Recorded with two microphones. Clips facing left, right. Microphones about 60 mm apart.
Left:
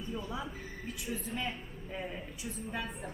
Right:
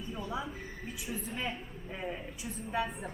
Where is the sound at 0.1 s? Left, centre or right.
Centre.